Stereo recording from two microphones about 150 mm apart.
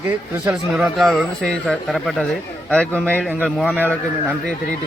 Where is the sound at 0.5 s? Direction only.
Centre (ahead or behind).